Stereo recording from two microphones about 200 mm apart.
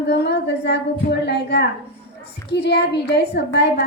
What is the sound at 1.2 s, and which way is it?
Speech, 55° left (ahead or behind).